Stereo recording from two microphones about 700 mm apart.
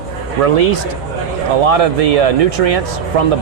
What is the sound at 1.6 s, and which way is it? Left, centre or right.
Speech, right.